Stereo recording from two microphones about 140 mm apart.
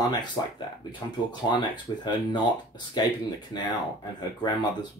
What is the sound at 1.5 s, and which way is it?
Speech, 30° left (ahead or behind).